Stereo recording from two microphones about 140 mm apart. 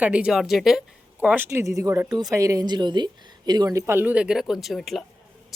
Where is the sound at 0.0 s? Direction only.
10° right (ahead or behind).